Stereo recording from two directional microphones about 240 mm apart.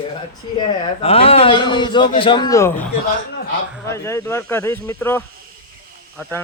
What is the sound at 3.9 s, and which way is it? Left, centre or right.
Speech, centre.